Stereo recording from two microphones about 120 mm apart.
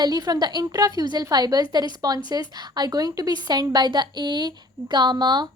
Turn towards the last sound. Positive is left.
turn(degrees=-35)  # may be behind; listen again after turning